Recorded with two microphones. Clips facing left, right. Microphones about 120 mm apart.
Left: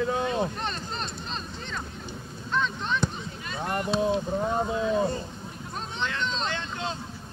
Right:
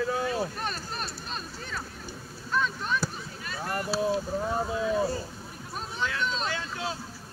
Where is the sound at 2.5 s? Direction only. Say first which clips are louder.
Left 1 dB; 5° right (ahead or behind).